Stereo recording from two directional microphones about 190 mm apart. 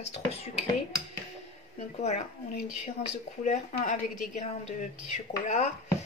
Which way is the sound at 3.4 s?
40° left (ahead or behind).